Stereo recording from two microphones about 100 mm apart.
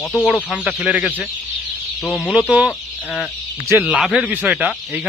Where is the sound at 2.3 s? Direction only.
10° right (ahead or behind).